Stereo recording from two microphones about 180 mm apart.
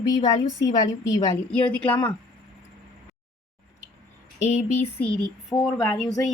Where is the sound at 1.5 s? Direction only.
10° left (ahead or behind).